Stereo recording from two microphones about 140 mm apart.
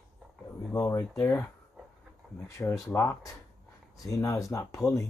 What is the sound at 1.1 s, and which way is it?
Speech, 15° left (ahead or behind).